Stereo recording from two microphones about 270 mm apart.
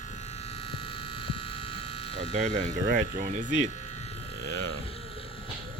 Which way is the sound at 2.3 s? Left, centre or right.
Right.